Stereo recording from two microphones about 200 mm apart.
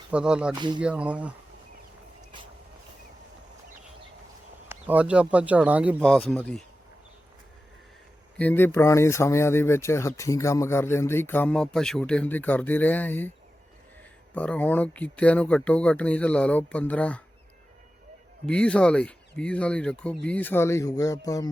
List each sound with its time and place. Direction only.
0.1 s speech: 5° right (ahead or behind)
4.7 s speech: 10° right (ahead or behind)
6.0 s speech: 5° left (ahead or behind)
8.4 s speech: 10° left (ahead or behind)
14.3 s speech: 5° left (ahead or behind)
18.4 s speech: 5° left (ahead or behind)